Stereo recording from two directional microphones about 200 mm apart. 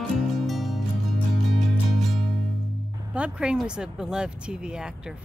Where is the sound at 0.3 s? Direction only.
Centre (ahead or behind).